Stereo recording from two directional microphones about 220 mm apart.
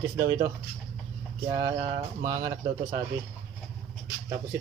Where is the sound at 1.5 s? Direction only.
15° right (ahead or behind).